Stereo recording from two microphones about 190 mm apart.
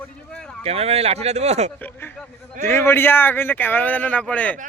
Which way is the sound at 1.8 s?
10° left (ahead or behind).